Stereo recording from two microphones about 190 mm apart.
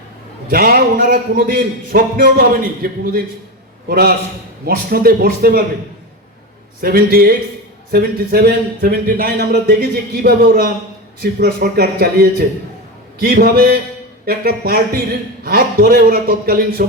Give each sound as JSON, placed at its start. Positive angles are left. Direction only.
{"t": 0.5, "sound": "a man's voice", "side_deg": -50}
{"t": 6.8, "sound": "a man's voice", "side_deg": -50}